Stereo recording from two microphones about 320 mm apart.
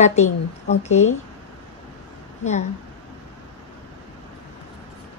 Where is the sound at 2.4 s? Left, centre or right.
Left.